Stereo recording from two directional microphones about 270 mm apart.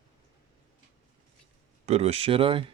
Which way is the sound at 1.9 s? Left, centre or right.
Right.